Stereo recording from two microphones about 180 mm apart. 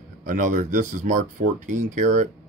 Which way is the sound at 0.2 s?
45° right (ahead or behind).